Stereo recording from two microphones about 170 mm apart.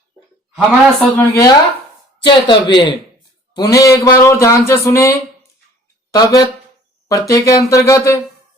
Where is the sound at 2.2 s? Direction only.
25° left (ahead or behind).